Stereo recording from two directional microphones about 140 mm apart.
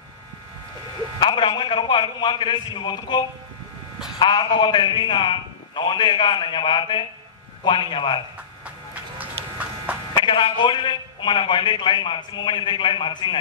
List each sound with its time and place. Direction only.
1.2 s a man's voice: 35° left (ahead or behind)
9.4 s electric shaver: 45° right (ahead or behind)
10.1 s a man's voice: 35° left (ahead or behind)